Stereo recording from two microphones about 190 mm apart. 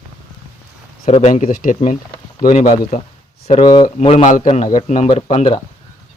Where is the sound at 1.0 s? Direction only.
35° left (ahead or behind).